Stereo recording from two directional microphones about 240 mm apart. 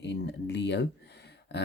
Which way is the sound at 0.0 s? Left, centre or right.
Left.